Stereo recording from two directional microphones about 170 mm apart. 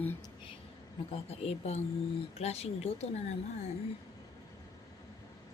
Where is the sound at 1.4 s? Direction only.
35° left (ahead or behind).